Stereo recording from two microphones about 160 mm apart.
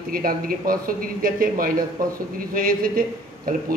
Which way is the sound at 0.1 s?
65° right (ahead or behind).